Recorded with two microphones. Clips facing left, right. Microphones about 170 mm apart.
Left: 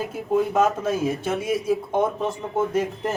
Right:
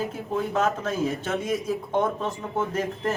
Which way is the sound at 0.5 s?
15° left (ahead or behind).